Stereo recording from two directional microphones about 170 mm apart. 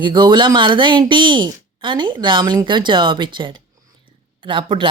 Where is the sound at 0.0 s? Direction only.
25° right (ahead or behind).